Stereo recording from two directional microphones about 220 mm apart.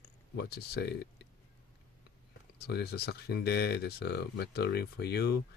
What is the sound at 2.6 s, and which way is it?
Speech, 45° left (ahead or behind).